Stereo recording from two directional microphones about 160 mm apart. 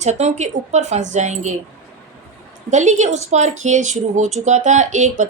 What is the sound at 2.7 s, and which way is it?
A woman's voice, 45° right (ahead or behind).